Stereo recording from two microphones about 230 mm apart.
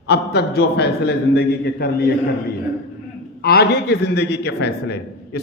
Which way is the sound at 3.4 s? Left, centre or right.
Left.